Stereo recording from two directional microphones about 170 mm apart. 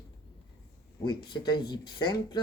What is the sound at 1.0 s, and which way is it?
Speech, 25° left (ahead or behind).